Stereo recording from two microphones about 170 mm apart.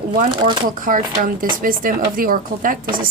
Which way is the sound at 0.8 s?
50° right (ahead or behind).